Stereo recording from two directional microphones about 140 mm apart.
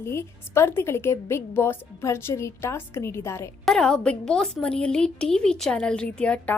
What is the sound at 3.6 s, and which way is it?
A woman's voice, 5° left (ahead or behind).